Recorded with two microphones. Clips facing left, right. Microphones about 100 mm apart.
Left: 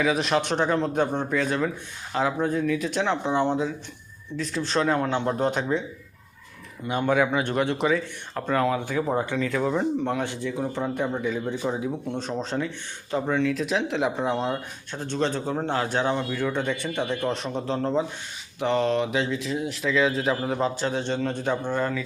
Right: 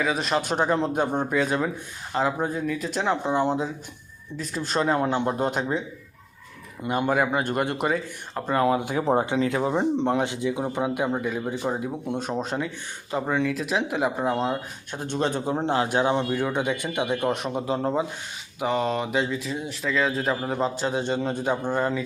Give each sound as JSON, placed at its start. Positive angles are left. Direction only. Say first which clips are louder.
{"t": 0.0, "sound": "speech", "louder": "left 2 dB", "side_deg": 0}
{"t": 6.8, "sound": "speech", "louder": "even", "side_deg": -5}
{"t": 9.0, "sound": "speech", "louder": "right 3 dB", "side_deg": -30}